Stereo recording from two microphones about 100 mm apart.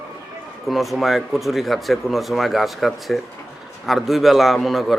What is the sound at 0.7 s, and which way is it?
Speech, centre (ahead or behind).